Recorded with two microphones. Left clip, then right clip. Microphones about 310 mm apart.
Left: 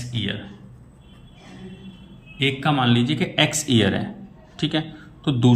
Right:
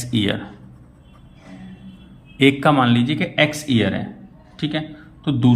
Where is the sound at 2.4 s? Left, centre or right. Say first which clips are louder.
Right 6 dB; centre.